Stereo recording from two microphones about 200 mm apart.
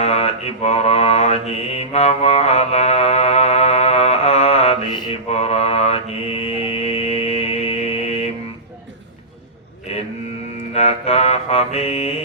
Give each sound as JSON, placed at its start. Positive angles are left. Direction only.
{"t": 0.0, "sound": "mantra", "side_deg": 30}
{"t": 9.9, "sound": "cattle", "side_deg": 30}
{"t": 10.8, "sound": "mantra", "side_deg": 30}